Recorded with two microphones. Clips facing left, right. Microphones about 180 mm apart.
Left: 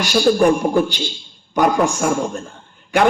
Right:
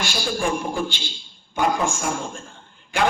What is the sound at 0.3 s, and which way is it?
A man's voice, 65° left (ahead or behind).